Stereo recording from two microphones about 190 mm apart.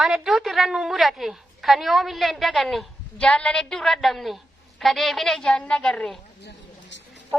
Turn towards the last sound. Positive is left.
turn(degrees=70)  # may be behind; listen again after turning